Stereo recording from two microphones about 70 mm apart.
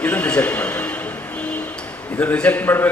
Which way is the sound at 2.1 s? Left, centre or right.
Left.